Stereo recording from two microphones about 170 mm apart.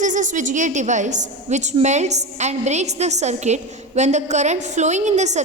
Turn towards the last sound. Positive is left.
turn(degrees=-45)  # may be behind; listen again after turning